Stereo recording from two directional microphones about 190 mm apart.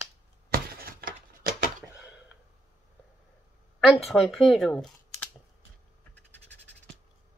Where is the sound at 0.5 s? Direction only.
50° right (ahead or behind).